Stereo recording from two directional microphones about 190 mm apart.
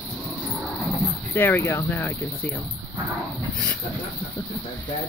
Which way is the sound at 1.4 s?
10° left (ahead or behind).